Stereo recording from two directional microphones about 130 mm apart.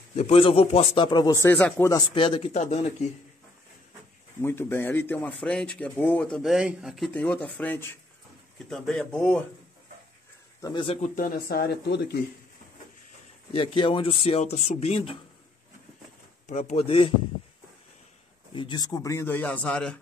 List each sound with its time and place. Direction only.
0.1 s speech: 55° left (ahead or behind); by 1.3 s 35° left (ahead or behind)
1.3 s a man's voice: 20° left (ahead or behind)
2.1 s speech: 40° left (ahead or behind)
2.5 s a man's voice: 60° left (ahead or behind)
4.4 s speech: 15° left (ahead or behind); by 7.1 s 5° right (ahead or behind)
7.2 s speech: 10° left (ahead or behind)
8.6 s speech: 5° left (ahead or behind)
10.7 s speech: 40° left (ahead or behind)
11.0 s speech: 90° left
13.5 s speech: 45° left (ahead or behind)
16.4 s speech: 65° left (ahead or behind); by 17.1 s 45° left (ahead or behind)
18.5 s a man's voice: 40° left (ahead or behind); by 20.0 s 5° left (ahead or behind)